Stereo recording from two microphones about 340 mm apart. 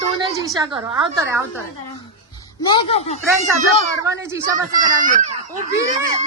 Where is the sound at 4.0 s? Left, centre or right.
Centre.